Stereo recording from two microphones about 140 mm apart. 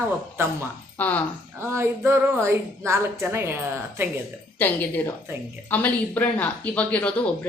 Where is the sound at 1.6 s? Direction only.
15° right (ahead or behind).